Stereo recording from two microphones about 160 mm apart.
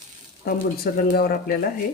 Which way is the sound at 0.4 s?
65° left (ahead or behind).